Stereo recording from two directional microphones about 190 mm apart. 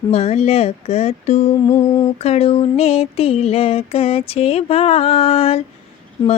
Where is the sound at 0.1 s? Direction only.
35° left (ahead or behind).